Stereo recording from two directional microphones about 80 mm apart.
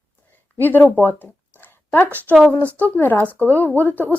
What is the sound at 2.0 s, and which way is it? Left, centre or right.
Speech, right.